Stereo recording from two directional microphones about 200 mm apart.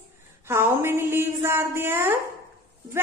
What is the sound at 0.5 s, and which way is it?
A woman's voice, 10° right (ahead or behind).